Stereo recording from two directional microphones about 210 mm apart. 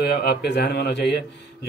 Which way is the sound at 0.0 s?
50° left (ahead or behind).